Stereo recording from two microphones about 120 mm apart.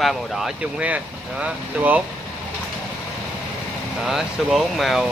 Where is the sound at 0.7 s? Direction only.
10° right (ahead or behind).